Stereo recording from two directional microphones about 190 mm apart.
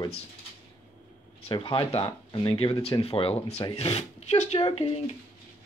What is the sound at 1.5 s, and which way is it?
Speech, 30° left (ahead or behind).